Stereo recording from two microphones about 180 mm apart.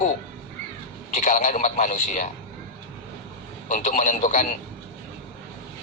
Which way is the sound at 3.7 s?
40° left (ahead or behind).